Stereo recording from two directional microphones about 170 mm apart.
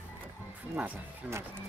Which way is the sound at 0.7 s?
10° right (ahead or behind).